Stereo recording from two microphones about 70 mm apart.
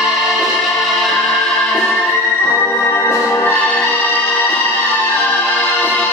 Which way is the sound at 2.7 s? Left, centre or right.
Left.